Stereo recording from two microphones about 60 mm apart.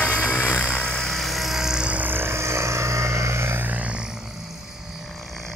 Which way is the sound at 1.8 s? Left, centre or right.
Right.